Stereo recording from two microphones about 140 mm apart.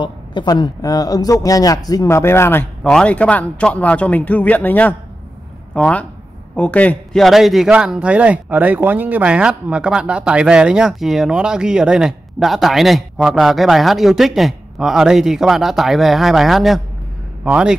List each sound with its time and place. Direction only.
0.0 s speech: 35° left (ahead or behind); by 2.6 s 20° left (ahead or behind)
2.8 s a man's voice: 5° left (ahead or behind)